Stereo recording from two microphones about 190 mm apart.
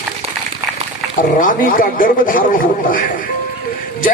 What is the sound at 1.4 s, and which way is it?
Speech, 45° left (ahead or behind).